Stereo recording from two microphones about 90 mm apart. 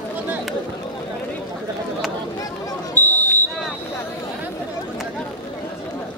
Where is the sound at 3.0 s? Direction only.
20° left (ahead or behind).